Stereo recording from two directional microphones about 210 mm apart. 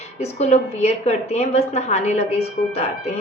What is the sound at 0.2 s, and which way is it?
A woman's voice, 30° left (ahead or behind).